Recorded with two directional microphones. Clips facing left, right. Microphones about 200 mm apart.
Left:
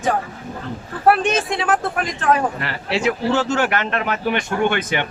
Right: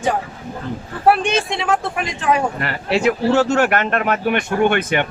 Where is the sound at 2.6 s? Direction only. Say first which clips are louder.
Right 3 dB; 55° right (ahead or behind).